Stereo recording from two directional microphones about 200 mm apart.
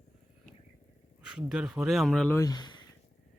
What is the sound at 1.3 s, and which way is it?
Speech, 5° right (ahead or behind).